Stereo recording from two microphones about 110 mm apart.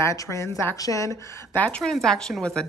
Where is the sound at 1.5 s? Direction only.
15° left (ahead or behind).